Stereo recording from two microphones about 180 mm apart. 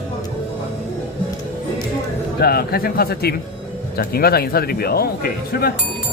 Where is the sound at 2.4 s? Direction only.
60° left (ahead or behind).